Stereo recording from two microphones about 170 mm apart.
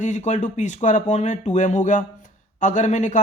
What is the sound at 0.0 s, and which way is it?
Speech, 45° left (ahead or behind).